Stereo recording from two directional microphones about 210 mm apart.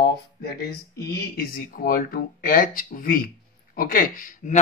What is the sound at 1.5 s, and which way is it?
Speech, 45° left (ahead or behind).